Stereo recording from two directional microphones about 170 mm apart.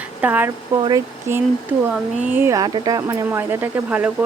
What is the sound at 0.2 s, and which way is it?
Speech, 10° right (ahead or behind).